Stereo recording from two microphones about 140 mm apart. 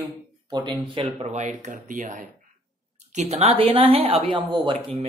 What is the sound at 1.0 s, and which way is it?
Speech, 55° right (ahead or behind).